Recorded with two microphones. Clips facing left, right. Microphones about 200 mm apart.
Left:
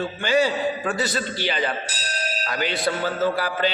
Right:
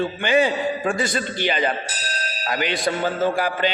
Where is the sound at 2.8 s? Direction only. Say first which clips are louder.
Right 1 dB; 50° right (ahead or behind).